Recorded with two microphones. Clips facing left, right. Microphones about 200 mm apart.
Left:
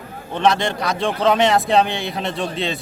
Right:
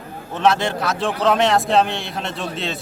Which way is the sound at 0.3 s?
5° right (ahead or behind).